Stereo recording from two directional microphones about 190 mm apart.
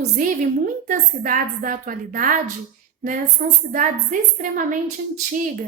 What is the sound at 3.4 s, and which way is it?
A woman's voice, 45° right (ahead or behind).